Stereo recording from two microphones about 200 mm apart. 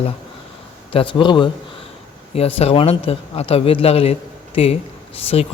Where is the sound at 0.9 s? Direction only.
25° left (ahead or behind).